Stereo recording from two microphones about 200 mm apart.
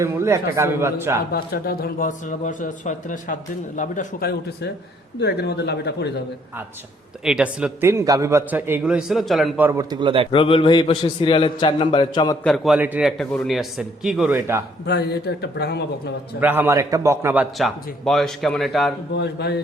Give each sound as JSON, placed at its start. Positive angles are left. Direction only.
{"t": 0.0, "sound": "a man's voice", "side_deg": -15}
{"t": 1.3, "sound": "a man's voice", "side_deg": 50}
{"t": 7.3, "sound": "a man's voice", "side_deg": -5}
{"t": 10.3, "sound": "a man's voice", "side_deg": 25}
{"t": 12.4, "sound": "a man's voice", "side_deg": 0}
{"t": 14.8, "sound": "speech", "side_deg": 55}
{"t": 16.4, "sound": "a man's voice", "side_deg": -10}
{"t": 19.1, "sound": "speech", "side_deg": 60}